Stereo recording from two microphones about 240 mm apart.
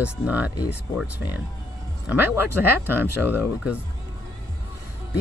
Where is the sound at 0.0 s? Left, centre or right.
Centre.